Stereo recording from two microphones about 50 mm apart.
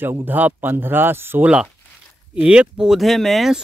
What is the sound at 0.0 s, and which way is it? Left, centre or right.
Speech, right.